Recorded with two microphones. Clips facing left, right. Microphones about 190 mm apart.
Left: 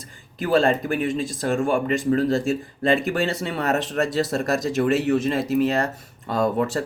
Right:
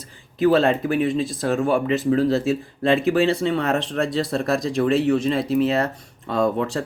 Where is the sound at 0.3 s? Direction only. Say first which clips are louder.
Right 2 dB; centre (ahead or behind).